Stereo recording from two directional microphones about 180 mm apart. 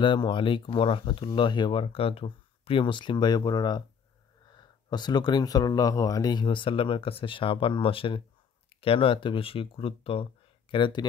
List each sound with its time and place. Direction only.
0.0 s speech: 25° left (ahead or behind)